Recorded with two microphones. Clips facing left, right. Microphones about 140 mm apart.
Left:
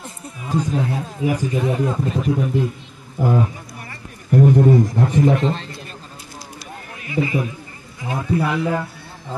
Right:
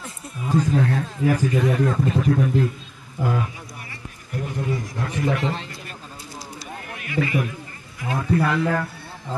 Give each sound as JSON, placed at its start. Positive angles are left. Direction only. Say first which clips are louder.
{"t": 0.7, "sound": "speech", "louder": "right 1 dB", "side_deg": 15}
{"t": 2.0, "sound": "a man's voice", "louder": "even", "side_deg": 0}
{"t": 2.3, "sound": "speech", "louder": "even", "side_deg": 15}
{"t": 4.3, "sound": "speech", "louder": "left 14 dB", "side_deg": 55}
{"t": 4.9, "sound": "speech", "louder": "left 8 dB", "side_deg": 20}
{"t": 7.0, "sound": "a man's voice", "louder": "left 2 dB", "side_deg": 25}